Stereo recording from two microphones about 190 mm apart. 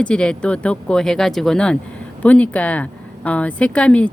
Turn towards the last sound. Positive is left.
turn(degrees=5)  # may be behind; listen again after turning